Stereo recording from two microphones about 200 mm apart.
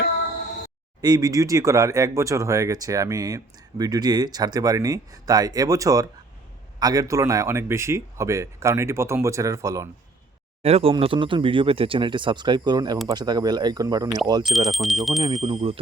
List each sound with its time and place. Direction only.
1.0 s speech: 20° right (ahead or behind)
10.6 s speech: 30° right (ahead or behind)
14.5 s speech: centre (ahead or behind)
15.2 s speech: 30° right (ahead or behind)